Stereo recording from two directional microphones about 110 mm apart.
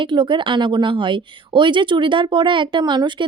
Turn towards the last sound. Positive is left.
turn(degrees=-45)  # may be behind; listen again after turning